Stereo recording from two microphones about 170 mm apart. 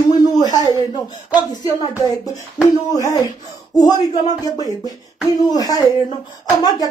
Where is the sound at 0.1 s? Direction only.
25° left (ahead or behind).